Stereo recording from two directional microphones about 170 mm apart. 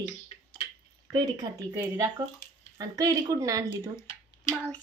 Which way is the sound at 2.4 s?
70° left (ahead or behind).